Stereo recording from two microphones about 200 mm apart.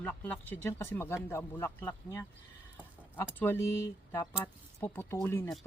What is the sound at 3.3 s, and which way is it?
A man's voice, 10° left (ahead or behind).